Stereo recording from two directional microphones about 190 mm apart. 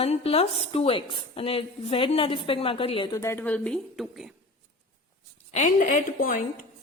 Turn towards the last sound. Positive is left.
turn(degrees=45)  # may be behind; listen again after turning